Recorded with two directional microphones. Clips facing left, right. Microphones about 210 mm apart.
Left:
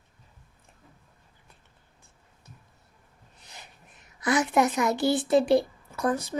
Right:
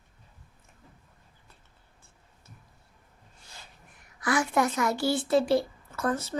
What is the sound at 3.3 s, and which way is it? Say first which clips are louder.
A woman's voice: left 2 dB; 20° left (ahead or behind).